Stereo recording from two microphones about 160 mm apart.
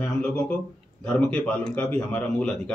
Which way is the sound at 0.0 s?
10° left (ahead or behind).